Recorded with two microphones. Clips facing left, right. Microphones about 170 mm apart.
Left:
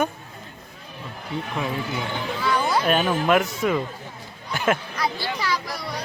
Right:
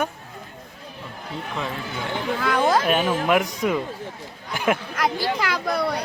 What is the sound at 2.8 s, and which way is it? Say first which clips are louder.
Speech: even; 5° right (ahead or behind).